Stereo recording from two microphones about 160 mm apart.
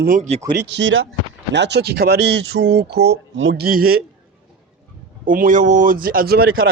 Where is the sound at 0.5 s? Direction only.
90° right; by 4.0 s 65° right (ahead or behind).